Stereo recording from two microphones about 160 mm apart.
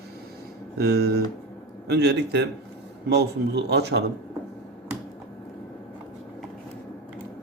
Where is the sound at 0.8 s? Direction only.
90° right.